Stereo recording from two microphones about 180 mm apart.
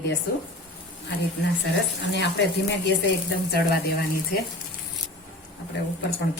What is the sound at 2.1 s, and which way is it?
Speech, 75° left (ahead or behind).